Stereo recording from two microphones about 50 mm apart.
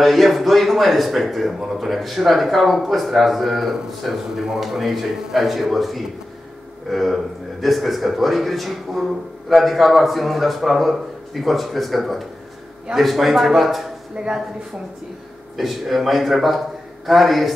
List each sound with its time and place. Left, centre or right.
0.0 s speech: centre
14.1 s speech: right
15.5 s speech: centre